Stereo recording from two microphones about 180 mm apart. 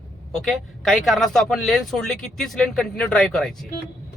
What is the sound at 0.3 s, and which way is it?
A man's voice, centre (ahead or behind).